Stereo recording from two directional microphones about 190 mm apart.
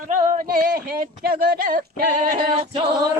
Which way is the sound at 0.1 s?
45° right (ahead or behind).